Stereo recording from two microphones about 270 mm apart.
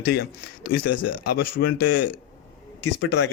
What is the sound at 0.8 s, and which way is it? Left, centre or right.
Speech, left.